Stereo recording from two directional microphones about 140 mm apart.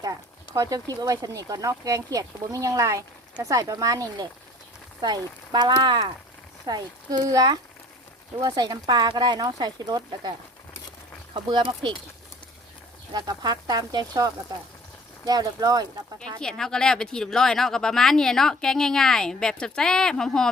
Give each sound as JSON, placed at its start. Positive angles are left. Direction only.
{"t": 0.0, "sound": "speech", "side_deg": -25}
{"t": 11.3, "sound": "speech", "side_deg": -30}
{"t": 13.1, "sound": "speech", "side_deg": -30}
{"t": 15.3, "sound": "speech", "side_deg": -25}
{"t": 16.4, "sound": "speech", "side_deg": 5}